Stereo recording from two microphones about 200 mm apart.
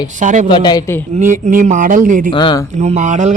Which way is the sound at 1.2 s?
40° right (ahead or behind).